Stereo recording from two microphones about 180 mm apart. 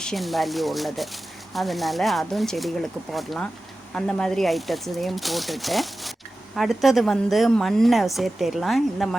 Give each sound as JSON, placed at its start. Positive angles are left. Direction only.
{"t": 0.0, "sound": "speech", "side_deg": 0}